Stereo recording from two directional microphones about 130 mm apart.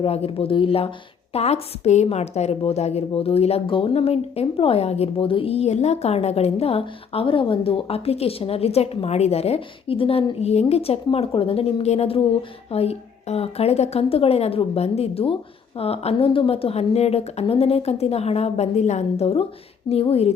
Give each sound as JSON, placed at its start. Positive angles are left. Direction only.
{"t": 0.0, "sound": "a woman's voice", "side_deg": 45}